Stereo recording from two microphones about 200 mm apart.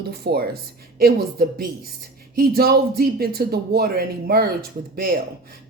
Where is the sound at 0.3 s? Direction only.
50° right (ahead or behind).